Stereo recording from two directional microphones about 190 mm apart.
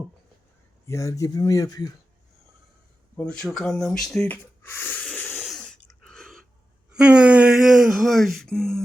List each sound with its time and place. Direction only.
0.9 s speech: 15° left (ahead or behind)
3.2 s a sound: 5° left (ahead or behind)
6.9 s speech: 5° right (ahead or behind)